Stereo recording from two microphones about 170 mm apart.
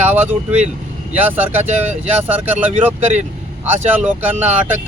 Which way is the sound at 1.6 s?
40° right (ahead or behind).